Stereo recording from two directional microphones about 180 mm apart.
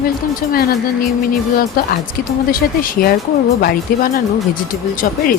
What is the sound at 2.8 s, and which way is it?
Speech, 55° left (ahead or behind).